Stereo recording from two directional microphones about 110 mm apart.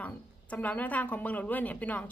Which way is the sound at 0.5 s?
15° left (ahead or behind).